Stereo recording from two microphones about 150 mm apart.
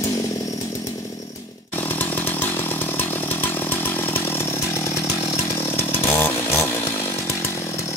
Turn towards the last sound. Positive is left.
turn(degrees=15)  # may be behind; listen again after turning